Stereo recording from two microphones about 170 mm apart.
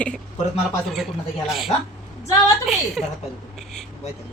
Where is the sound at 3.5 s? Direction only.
Centre (ahead or behind).